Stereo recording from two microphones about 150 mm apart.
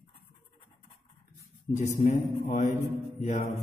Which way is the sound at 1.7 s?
50° left (ahead or behind).